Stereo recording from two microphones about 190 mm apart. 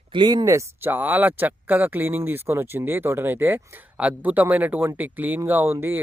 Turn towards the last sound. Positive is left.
turn(degrees=-10)  # may be behind; listen again after turning